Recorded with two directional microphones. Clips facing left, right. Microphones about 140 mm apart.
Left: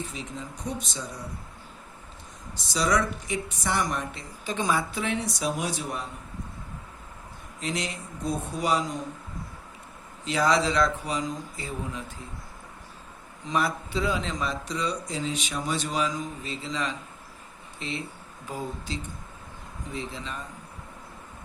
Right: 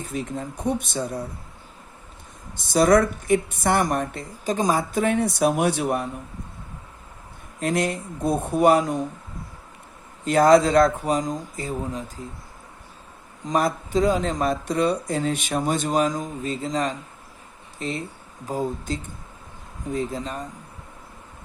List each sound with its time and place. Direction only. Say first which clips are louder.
0.1 s speech: right 8 dB; 55° right (ahead or behind)
2.7 s speech: right 8 dB; 50° right (ahead or behind)
7.6 s speech: right 8 dB; 50° right (ahead or behind)
10.2 s speech: right 8 dB; 50° right (ahead or behind)
13.4 s speech: right 5 dB; 45° right (ahead or behind)